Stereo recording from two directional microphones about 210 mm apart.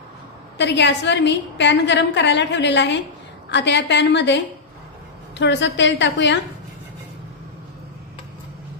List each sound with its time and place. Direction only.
0.6 s a woman's voice: 55° left (ahead or behind)
5.4 s a woman's voice: 55° left (ahead or behind)